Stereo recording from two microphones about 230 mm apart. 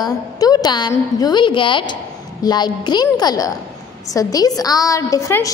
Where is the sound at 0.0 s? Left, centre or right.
Centre.